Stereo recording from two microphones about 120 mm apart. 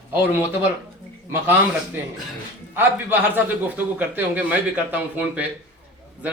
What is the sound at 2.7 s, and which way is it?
A man's voice, 15° right (ahead or behind).